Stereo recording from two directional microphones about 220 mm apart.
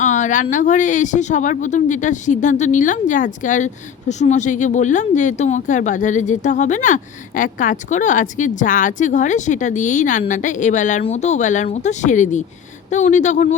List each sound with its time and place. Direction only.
0.0 s speech: 35° left (ahead or behind)